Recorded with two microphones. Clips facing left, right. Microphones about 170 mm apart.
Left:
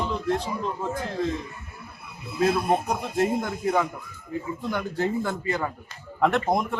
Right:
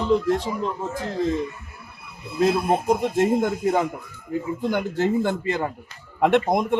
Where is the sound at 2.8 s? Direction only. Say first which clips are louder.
Right 5 dB; 25° right (ahead or behind).